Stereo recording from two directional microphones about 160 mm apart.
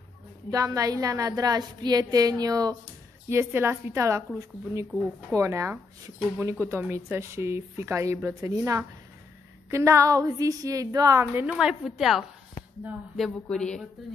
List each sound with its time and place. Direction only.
0.5 s a woman's voice: 20° right (ahead or behind)
5.3 s a woman's voice: 20° right (ahead or behind)
11.5 s speech: centre (ahead or behind)